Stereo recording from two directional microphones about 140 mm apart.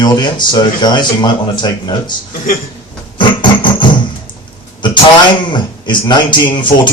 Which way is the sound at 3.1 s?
35° left (ahead or behind).